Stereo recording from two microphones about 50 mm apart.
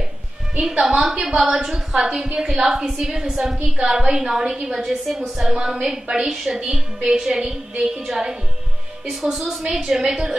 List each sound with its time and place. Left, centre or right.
0.6 s a woman's voice: centre
4.8 s a woman's voice: centre